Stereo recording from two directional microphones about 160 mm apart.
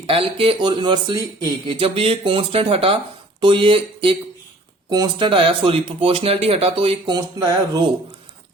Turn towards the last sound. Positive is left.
turn(degrees=-25)  # may be behind; listen again after turning